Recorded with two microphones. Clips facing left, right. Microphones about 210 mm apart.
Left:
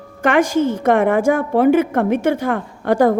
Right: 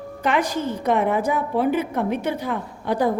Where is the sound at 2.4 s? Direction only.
85° left.